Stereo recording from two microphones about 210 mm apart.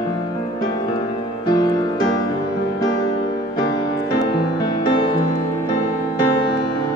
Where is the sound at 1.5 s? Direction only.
20° left (ahead or behind).